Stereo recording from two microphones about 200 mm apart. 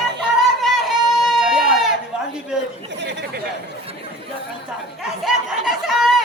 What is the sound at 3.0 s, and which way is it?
Chatter, 60° right (ahead or behind).